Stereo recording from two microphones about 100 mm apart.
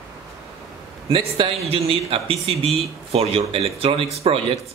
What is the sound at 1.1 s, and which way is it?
Speech, 65° right (ahead or behind).